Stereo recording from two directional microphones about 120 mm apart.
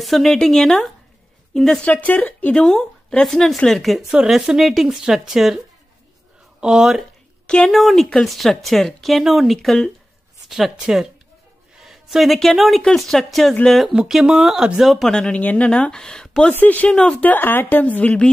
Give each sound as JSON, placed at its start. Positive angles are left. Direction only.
{"t": 0.0, "sound": "speech", "side_deg": 0}
{"t": 6.6, "sound": "a woman's voice", "side_deg": -5}